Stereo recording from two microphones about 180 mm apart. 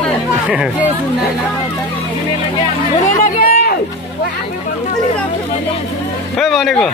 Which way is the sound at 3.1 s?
55° left (ahead or behind).